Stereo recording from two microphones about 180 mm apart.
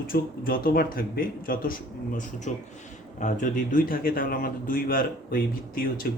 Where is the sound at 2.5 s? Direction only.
40° left (ahead or behind).